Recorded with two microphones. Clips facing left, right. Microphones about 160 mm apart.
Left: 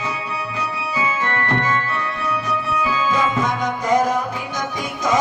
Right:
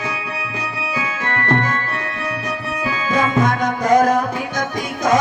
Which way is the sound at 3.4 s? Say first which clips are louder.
Right 3 dB; 40° right (ahead or behind).